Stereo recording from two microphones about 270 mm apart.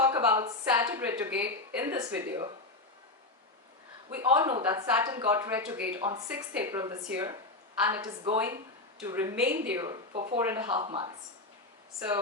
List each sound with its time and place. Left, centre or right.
0.0 s speech: centre
4.2 s speech: centre
10.3 s speech: centre